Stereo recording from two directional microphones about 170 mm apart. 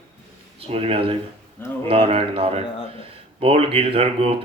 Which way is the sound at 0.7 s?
35° right (ahead or behind).